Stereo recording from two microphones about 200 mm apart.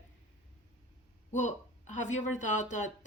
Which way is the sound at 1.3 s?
35° left (ahead or behind).